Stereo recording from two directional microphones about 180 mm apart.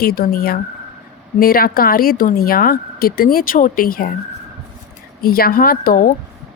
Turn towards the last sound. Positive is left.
turn(degrees=50)  # may be behind; listen again after turning